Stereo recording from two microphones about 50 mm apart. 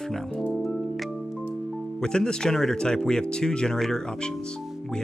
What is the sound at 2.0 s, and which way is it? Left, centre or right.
Speech, centre.